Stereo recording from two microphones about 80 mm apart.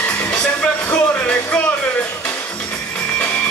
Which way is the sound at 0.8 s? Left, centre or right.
Left.